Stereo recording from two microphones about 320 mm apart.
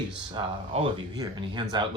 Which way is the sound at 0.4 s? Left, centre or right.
Centre.